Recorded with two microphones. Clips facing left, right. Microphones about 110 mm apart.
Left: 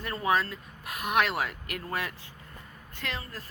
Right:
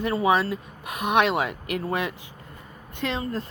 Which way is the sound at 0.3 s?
20° right (ahead or behind).